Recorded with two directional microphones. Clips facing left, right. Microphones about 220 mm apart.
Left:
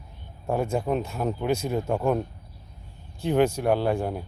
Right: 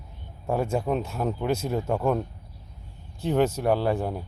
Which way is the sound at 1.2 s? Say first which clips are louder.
Left 1 dB; centre (ahead or behind).